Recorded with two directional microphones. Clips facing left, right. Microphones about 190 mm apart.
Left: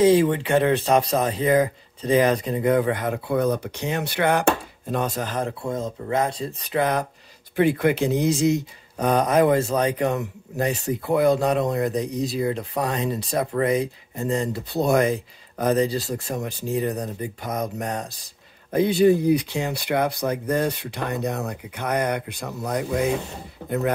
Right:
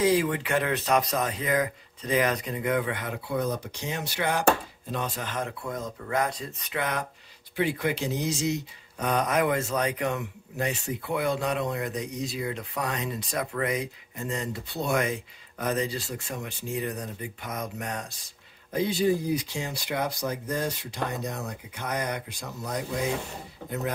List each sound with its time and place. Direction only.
0.0 s a man's voice: 30° left (ahead or behind); by 4.5 s 60° left (ahead or behind)
4.9 s a man's voice: 45° left (ahead or behind)
7.5 s speech: 55° left (ahead or behind)
8.9 s a man's voice: 35° left (ahead or behind)
18.7 s speech: 60° left (ahead or behind)